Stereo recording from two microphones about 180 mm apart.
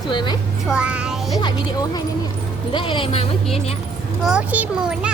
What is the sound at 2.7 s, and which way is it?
Speech, 25° left (ahead or behind).